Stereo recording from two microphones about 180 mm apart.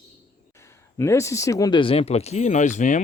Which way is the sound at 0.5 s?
15° left (ahead or behind).